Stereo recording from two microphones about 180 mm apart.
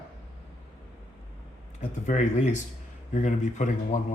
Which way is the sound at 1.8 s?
40° left (ahead or behind).